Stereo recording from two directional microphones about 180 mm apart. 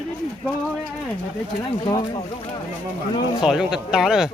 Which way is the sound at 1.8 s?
25° left (ahead or behind).